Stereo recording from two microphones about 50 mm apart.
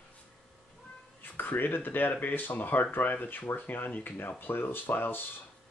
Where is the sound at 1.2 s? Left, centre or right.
Left.